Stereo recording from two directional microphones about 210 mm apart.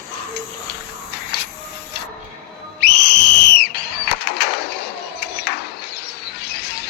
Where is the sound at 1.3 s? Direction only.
55° left (ahead or behind).